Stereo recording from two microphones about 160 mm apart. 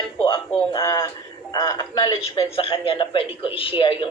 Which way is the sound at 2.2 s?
35° left (ahead or behind).